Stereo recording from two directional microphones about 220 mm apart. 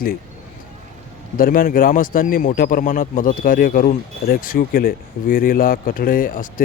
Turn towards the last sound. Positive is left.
turn(degrees=40)  # may be behind; listen again after turning